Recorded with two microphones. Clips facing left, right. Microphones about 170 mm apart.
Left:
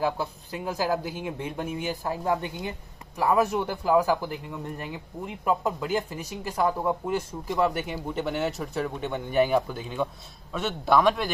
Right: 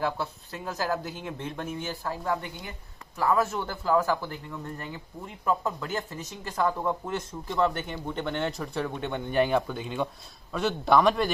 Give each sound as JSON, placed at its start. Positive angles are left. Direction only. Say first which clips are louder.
{"t": 0.0, "sound": "a man's voice", "louder": "left 2 dB", "side_deg": 15}